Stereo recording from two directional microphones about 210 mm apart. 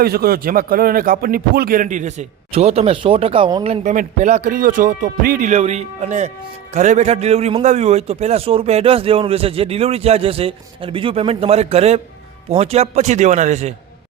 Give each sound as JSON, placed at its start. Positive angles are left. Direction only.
{"t": 0.0, "sound": "a man's voice", "side_deg": -45}